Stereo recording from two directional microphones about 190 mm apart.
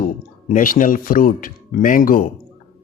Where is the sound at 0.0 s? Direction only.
45° left (ahead or behind).